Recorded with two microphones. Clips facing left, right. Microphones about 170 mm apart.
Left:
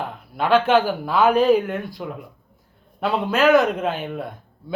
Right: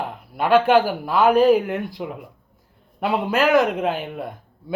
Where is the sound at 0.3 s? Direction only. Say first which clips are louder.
Right 1 dB; 10° right (ahead or behind).